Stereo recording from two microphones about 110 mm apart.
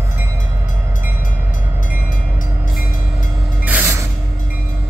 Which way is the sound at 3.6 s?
15° right (ahead or behind).